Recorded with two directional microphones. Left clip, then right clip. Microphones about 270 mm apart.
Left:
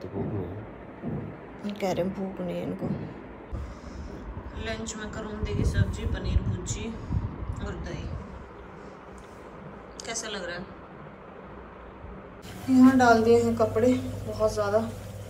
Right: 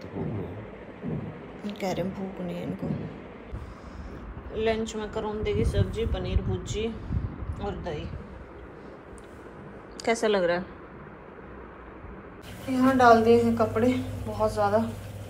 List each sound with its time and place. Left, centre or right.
0.2 s vehicle: centre
1.6 s a woman's voice: centre
4.6 s a man's voice: centre
10.0 s a man's voice: centre
12.7 s a woman's voice: centre